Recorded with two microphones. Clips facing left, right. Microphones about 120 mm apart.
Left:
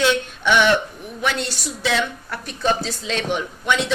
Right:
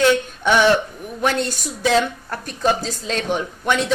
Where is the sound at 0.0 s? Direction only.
40° right (ahead or behind).